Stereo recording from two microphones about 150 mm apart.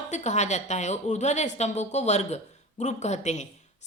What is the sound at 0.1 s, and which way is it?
A woman's voice, 50° left (ahead or behind).